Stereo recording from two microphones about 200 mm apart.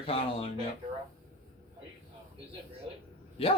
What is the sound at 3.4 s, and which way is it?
Speech, 30° left (ahead or behind).